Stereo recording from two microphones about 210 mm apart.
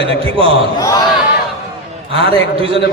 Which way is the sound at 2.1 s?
25° right (ahead or behind).